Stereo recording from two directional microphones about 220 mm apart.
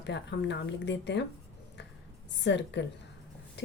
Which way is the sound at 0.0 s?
50° left (ahead or behind).